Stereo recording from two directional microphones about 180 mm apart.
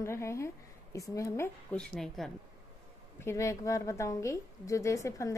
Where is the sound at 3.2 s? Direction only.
15° left (ahead or behind).